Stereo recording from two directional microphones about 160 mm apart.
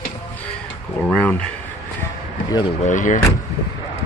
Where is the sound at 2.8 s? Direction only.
55° left (ahead or behind).